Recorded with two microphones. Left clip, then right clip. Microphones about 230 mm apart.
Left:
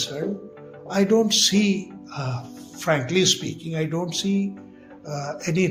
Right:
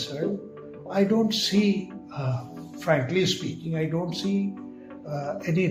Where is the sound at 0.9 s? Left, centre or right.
Left.